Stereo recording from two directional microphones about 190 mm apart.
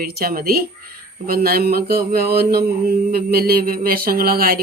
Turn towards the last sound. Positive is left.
turn(degrees=-50)  # may be behind; listen again after turning